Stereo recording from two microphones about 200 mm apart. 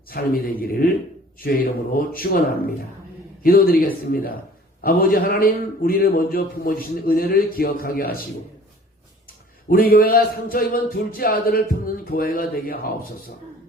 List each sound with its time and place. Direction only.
0.1 s speech: 45° left (ahead or behind)
9.6 s speech: 45° left (ahead or behind)